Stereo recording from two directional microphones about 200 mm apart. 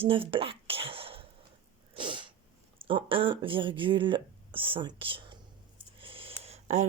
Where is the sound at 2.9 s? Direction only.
25° right (ahead or behind).